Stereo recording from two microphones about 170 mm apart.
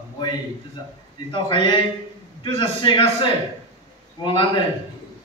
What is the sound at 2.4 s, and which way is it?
Speech, 30° left (ahead or behind).